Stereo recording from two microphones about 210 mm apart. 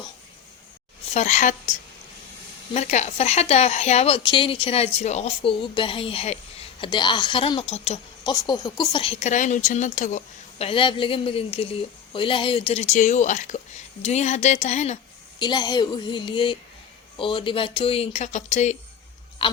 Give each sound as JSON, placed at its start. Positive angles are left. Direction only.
{"t": 1.1, "sound": "speech", "side_deg": 35}
{"t": 2.7, "sound": "speech", "side_deg": 30}
{"t": 15.4, "sound": "speech", "side_deg": 20}
{"t": 19.4, "sound": "a sound", "side_deg": 25}